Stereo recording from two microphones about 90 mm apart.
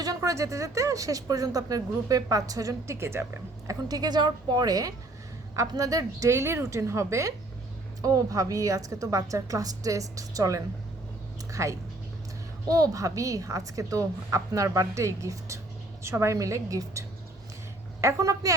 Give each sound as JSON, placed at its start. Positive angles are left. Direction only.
{"t": 0.2, "sound": "speech", "side_deg": -35}
{"t": 3.7, "sound": "a woman's voice", "side_deg": -45}